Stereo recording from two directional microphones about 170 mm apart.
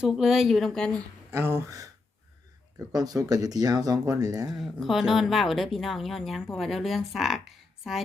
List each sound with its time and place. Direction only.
0.0 s speech: centre (ahead or behind)
1.3 s speech: 15° right (ahead or behind)
4.5 s speech: centre (ahead or behind)